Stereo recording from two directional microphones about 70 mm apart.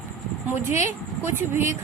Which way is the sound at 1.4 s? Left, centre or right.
Right.